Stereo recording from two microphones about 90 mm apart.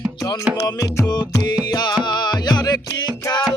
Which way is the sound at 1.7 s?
50° left (ahead or behind).